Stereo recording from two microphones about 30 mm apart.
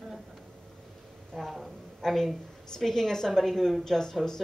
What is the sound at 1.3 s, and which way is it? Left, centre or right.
A woman's voice, centre.